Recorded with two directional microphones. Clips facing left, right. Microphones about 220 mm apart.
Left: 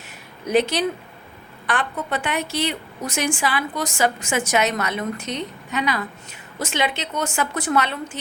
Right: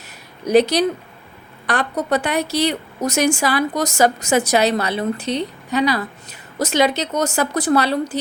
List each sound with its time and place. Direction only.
0.4 s a woman's voice: 40° right (ahead or behind)